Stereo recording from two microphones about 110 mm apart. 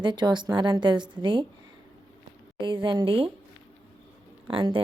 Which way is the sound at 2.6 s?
50° right (ahead or behind).